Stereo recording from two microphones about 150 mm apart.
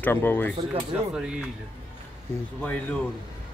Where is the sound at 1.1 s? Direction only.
5° right (ahead or behind).